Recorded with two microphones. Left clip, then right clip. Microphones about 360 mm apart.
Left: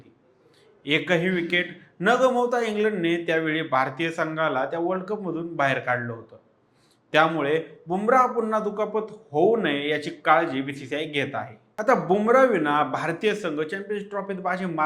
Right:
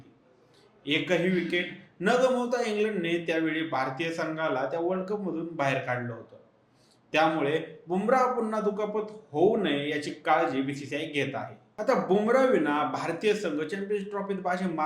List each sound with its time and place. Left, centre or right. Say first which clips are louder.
0.9 s a man's voice: left 4 dB; left
7.1 s a man's voice: left 4 dB; left